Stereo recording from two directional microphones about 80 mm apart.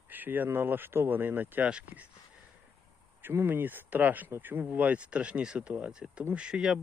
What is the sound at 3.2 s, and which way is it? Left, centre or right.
Speech, right.